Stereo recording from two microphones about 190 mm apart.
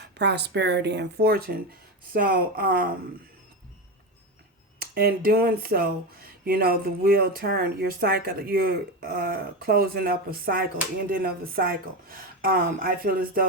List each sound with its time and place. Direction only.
0.0 s speech: 60° right (ahead or behind)
4.8 s speech: 55° right (ahead or behind)